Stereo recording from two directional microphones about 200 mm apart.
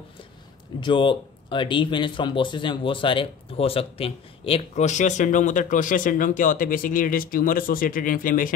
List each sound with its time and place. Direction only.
0.7 s speech: 25° left (ahead or behind); by 8.5 s 45° left (ahead or behind)